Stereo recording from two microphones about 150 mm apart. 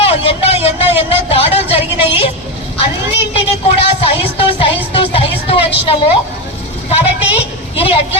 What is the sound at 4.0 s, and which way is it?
Music, 40° left (ahead or behind).